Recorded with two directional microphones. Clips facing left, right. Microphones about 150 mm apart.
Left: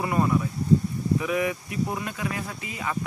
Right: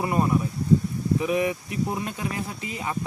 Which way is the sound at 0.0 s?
20° right (ahead or behind).